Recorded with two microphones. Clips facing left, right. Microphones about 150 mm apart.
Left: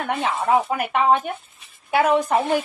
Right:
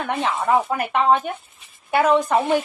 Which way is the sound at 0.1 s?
Centre (ahead or behind).